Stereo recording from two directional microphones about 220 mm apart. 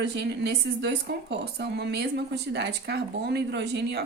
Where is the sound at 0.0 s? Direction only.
50° right (ahead or behind).